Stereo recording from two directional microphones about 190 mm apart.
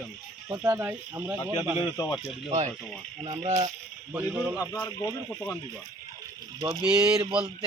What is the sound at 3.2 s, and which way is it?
Speech, 30° right (ahead or behind).